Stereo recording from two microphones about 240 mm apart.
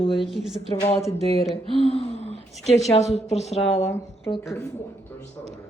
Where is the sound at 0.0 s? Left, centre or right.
Left.